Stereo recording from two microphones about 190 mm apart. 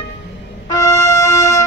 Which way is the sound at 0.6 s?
15° left (ahead or behind).